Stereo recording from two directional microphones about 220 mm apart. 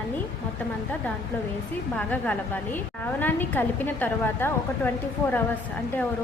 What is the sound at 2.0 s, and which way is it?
A woman's voice, 5° left (ahead or behind).